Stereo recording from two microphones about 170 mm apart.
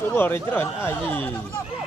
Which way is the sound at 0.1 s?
10° left (ahead or behind).